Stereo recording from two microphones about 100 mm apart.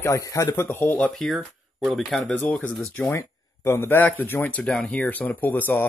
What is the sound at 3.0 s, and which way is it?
Speech, 25° left (ahead or behind).